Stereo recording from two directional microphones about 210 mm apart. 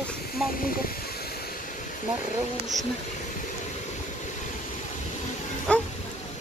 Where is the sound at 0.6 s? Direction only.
45° left (ahead or behind).